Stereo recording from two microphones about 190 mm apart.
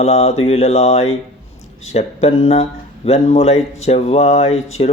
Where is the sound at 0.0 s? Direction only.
35° left (ahead or behind).